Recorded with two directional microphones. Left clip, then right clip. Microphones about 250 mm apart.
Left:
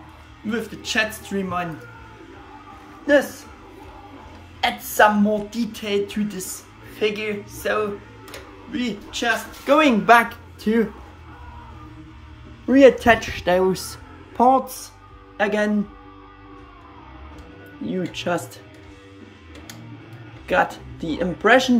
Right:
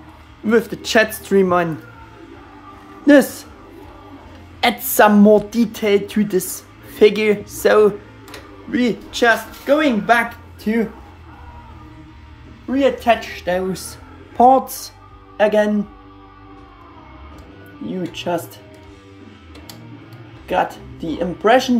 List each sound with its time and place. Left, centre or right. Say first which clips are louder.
0.5 s speech: right 10 dB; centre
4.6 s a woman's voice: right 3 dB; right
9.7 s speech: left 1 dB; centre
12.6 s speech: left 3 dB; centre
17.8 s speech: right 1 dB; centre
20.4 s speech: right 1 dB; centre